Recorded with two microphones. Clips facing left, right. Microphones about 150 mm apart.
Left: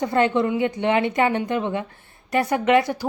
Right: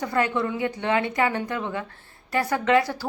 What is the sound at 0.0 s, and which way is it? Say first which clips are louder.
Speech: left 5 dB; 25° left (ahead or behind).